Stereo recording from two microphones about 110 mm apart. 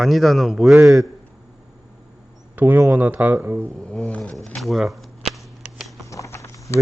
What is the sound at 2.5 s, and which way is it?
Speech, 20° right (ahead or behind).